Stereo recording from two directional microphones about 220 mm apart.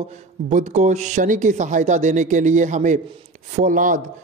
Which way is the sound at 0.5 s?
35° right (ahead or behind).